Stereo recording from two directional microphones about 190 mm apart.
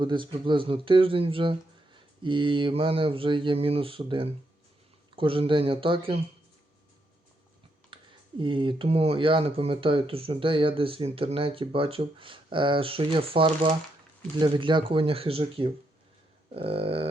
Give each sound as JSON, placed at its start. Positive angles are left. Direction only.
{"t": 0.0, "sound": "speech", "side_deg": -25}
{"t": 7.9, "sound": "a sound", "side_deg": -25}
{"t": 8.4, "sound": "speech", "side_deg": -25}